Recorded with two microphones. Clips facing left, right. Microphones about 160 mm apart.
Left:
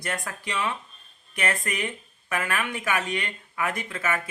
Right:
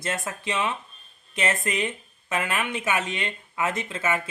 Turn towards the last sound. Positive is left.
turn(degrees=-25)  # may be behind; listen again after turning